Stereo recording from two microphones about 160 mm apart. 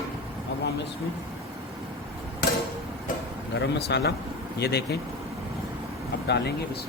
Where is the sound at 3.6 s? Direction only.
90° left.